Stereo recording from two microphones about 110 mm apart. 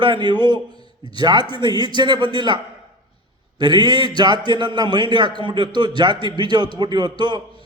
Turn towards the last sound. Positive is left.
turn(degrees=-45)  # may be behind; listen again after turning